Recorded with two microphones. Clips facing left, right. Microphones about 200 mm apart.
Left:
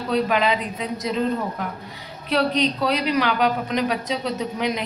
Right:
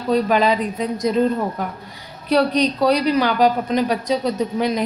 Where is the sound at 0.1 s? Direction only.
40° right (ahead or behind).